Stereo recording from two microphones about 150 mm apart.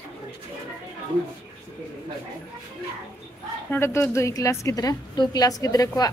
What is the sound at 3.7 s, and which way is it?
A woman's voice, 15° left (ahead or behind).